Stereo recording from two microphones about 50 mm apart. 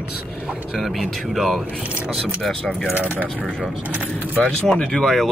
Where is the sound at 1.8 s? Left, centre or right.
Right.